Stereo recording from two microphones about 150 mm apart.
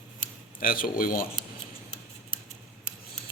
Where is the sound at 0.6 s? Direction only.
70° left (ahead or behind).